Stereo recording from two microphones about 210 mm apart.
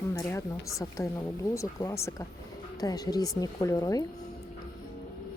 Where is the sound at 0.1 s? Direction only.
10° left (ahead or behind).